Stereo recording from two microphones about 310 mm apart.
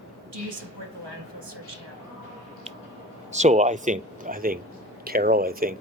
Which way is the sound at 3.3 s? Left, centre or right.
Right.